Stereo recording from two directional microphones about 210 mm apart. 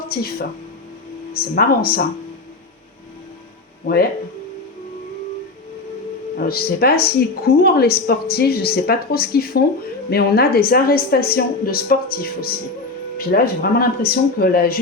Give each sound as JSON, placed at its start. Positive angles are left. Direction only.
{"t": 0.1, "sound": "a woman's voice", "side_deg": 45}
{"t": 6.3, "sound": "a woman's voice", "side_deg": 45}